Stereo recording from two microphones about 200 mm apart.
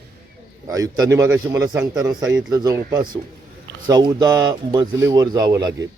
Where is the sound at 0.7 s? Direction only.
15° right (ahead or behind).